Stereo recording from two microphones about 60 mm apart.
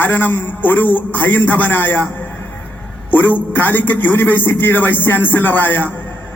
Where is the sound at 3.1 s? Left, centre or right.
Left.